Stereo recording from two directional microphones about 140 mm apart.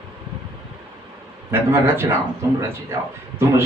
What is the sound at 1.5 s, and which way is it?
Speech, 15° right (ahead or behind).